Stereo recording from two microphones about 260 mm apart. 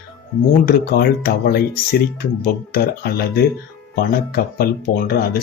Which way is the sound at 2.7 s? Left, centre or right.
Left.